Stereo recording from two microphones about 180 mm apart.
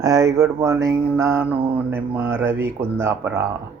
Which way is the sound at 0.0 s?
15° right (ahead or behind).